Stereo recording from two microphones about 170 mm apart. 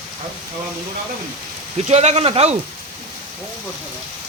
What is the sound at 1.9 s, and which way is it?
Speech, 40° right (ahead or behind).